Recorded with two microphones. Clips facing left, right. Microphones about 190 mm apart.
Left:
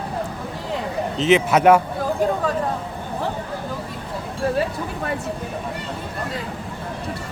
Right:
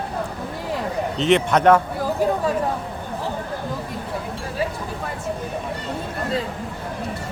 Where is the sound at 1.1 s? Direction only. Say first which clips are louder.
Left 1 dB; centre (ahead or behind).